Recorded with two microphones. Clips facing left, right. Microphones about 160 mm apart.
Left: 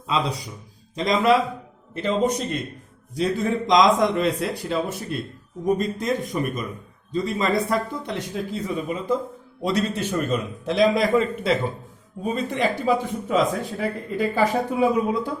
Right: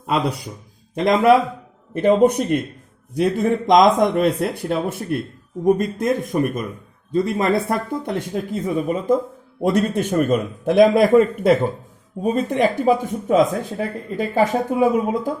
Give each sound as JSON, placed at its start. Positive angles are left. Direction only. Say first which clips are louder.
{"t": 0.9, "sound": "a man's voice", "louder": "right 5 dB", "side_deg": -55}